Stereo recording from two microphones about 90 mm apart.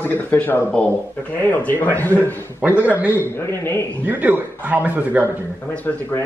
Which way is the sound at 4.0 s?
20° right (ahead or behind).